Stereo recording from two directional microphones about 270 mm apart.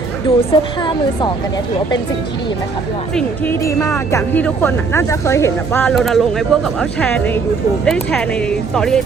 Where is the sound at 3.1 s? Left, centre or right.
Centre.